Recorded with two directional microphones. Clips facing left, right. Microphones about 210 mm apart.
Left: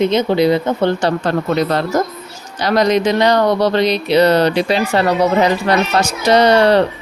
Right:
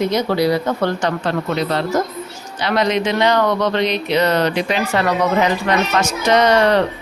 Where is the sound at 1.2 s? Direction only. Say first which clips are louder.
Left 4 dB; 45° left (ahead or behind).